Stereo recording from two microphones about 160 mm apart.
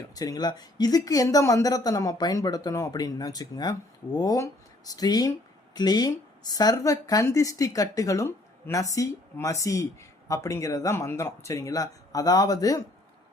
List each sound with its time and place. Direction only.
0.2 s speech: 25° left (ahead or behind)